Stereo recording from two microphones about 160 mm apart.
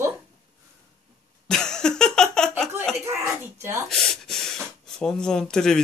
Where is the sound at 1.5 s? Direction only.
5° left (ahead or behind).